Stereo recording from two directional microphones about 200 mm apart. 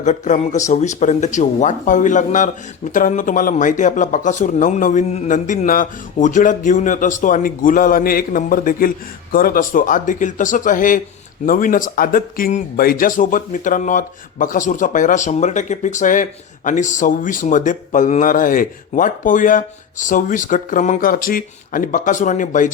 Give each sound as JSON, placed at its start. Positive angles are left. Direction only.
{"t": 0.0, "sound": "speech", "side_deg": 35}